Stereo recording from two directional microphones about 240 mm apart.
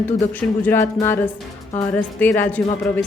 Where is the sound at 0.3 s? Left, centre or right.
Centre.